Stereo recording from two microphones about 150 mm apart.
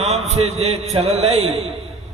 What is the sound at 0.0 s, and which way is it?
A man's voice, 45° right (ahead or behind).